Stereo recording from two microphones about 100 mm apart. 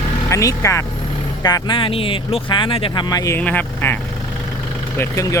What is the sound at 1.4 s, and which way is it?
Speech, 45° left (ahead or behind).